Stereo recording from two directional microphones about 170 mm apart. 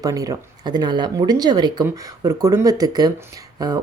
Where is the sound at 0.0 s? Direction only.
20° right (ahead or behind).